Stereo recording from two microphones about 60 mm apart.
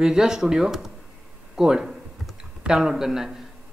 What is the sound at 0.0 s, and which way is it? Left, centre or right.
Speech, centre.